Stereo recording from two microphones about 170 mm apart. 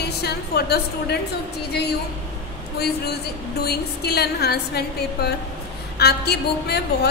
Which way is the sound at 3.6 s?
70° left (ahead or behind).